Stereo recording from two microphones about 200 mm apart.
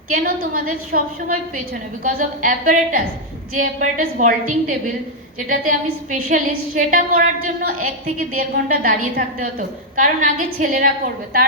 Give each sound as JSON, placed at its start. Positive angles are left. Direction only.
{"t": 0.1, "sound": "a woman's voice", "side_deg": -45}
{"t": 2.0, "sound": "a woman's voice", "side_deg": -40}
{"t": 5.5, "sound": "a woman's voice", "side_deg": -40}